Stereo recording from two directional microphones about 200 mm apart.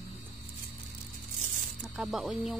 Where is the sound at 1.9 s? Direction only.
Centre (ahead or behind).